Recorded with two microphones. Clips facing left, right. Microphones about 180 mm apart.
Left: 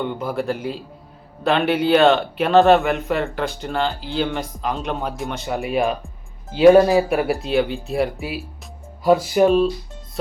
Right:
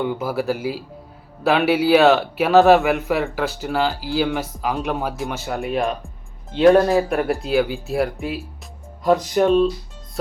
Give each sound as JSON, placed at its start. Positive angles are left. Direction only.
{"t": 0.0, "sound": "speech", "side_deg": -5}